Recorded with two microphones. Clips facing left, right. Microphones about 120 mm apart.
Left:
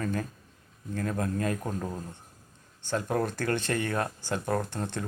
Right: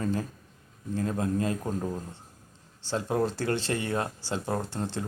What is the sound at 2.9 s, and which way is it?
Speech, 25° right (ahead or behind).